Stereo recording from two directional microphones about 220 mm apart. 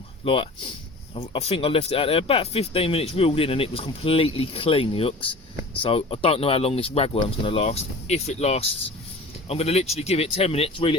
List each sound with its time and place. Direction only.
1.1 s speech: 25° left (ahead or behind)